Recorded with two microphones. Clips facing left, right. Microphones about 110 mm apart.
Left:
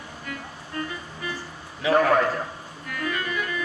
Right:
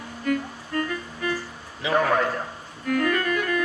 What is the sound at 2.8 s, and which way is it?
Music, 50° right (ahead or behind).